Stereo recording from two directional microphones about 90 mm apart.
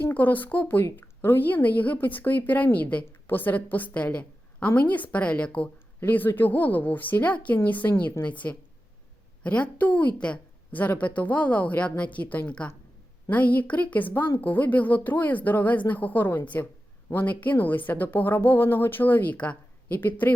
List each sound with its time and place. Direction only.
0.0 s a woman's voice: 20° left (ahead or behind)